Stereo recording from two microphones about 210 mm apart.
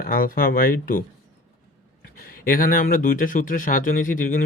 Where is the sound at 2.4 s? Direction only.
40° left (ahead or behind).